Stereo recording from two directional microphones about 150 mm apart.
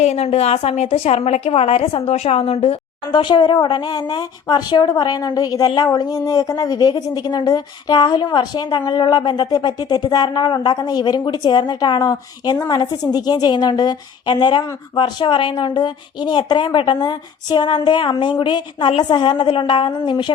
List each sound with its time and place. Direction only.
0.0 s a woman's voice: 45° left (ahead or behind)